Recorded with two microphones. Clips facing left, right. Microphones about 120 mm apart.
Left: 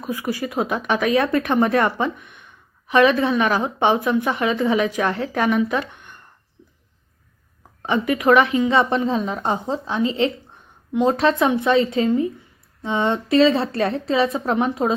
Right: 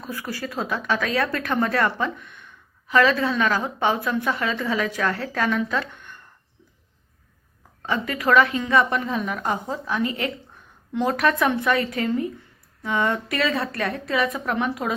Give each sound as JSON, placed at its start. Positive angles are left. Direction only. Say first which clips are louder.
{"t": 0.0, "sound": "speech", "louder": "left 6 dB", "side_deg": 15}
{"t": 7.8, "sound": "speech", "louder": "left 5 dB", "side_deg": 20}
{"t": 8.8, "sound": "speech", "louder": "left 4 dB", "side_deg": 30}